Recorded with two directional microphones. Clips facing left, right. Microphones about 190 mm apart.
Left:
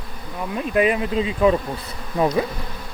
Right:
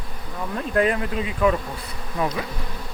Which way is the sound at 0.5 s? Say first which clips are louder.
Left 2 dB; 15° left (ahead or behind).